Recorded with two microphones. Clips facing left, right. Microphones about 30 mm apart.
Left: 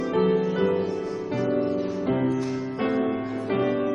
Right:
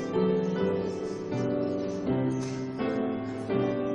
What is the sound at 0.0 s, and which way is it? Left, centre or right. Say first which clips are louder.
Music: left 5 dB; left.